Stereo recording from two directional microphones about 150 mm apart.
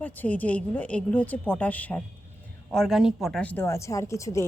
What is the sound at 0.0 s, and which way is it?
A woman's voice, 10° left (ahead or behind).